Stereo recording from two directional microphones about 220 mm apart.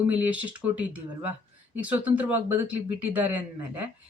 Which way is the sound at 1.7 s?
5° right (ahead or behind).